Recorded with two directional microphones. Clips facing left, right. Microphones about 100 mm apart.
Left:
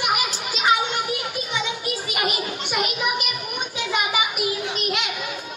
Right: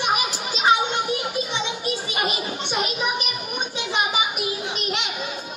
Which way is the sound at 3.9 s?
30° right (ahead or behind).